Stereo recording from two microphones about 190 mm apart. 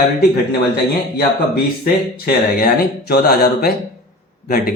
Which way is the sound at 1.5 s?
55° left (ahead or behind).